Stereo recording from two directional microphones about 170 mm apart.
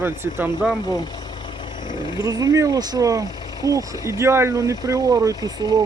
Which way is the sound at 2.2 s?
20° right (ahead or behind).